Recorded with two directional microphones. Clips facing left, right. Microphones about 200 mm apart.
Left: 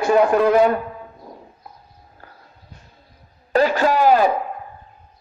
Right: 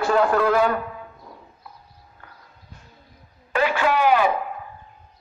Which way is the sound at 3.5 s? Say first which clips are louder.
Left 4 dB; 40° left (ahead or behind).